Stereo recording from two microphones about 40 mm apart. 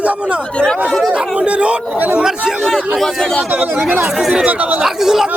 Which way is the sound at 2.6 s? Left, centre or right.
Centre.